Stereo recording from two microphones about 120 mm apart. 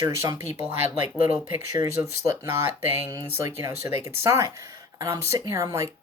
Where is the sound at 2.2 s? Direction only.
20° right (ahead or behind).